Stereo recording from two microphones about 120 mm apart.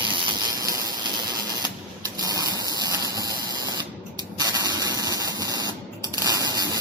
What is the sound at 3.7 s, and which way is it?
Spray, 35° right (ahead or behind).